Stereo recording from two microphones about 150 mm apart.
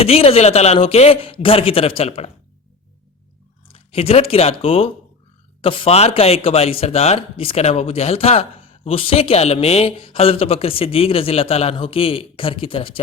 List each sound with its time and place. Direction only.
0.0 s speech: 40° left (ahead or behind)
3.7 s speech: 40° left (ahead or behind)